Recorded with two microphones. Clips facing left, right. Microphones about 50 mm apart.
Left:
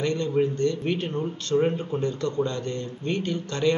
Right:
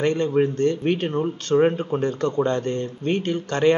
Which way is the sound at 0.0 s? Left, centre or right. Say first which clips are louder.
Right 4 dB; right.